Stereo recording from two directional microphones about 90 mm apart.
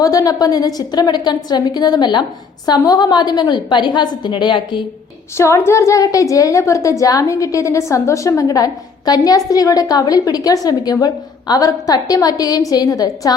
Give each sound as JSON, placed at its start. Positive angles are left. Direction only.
{"t": 0.0, "sound": "a woman's voice", "side_deg": 40}
{"t": 5.4, "sound": "a woman's voice", "side_deg": 30}